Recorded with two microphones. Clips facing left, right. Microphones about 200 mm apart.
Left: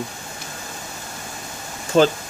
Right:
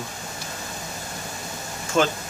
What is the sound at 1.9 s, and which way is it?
Speech, 35° left (ahead or behind).